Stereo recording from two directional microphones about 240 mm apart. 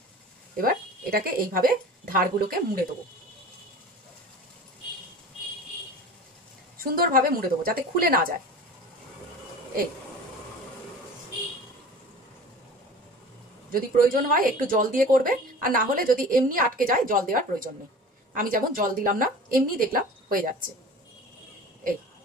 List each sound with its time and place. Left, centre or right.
1.1 s speech: right
7.0 s speech: right
13.7 s speech: right